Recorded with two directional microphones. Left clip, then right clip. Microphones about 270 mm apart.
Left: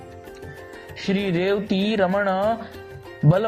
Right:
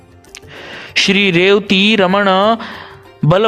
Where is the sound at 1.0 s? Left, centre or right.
Right.